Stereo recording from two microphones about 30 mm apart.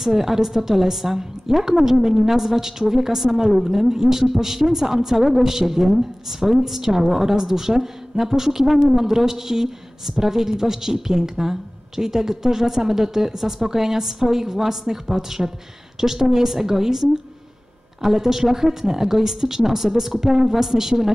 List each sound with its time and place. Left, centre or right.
0.0 s a woman's voice: centre